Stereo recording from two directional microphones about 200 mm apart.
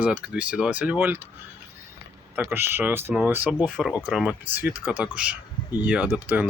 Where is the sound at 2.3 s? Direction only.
10° right (ahead or behind).